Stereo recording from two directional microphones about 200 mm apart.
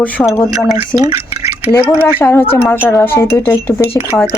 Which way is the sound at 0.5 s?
20° right (ahead or behind).